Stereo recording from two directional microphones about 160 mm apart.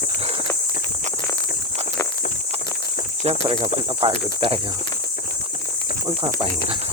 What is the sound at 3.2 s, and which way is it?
Speech, 40° right (ahead or behind).